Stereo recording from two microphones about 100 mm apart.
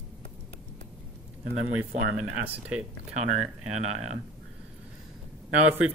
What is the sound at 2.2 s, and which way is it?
Speech, 15° right (ahead or behind).